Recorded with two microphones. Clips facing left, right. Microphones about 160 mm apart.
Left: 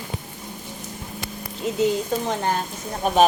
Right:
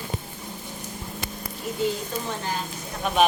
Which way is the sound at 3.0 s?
40° left (ahead or behind).